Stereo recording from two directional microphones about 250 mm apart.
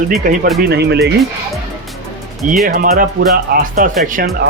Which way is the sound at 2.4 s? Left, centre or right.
Right.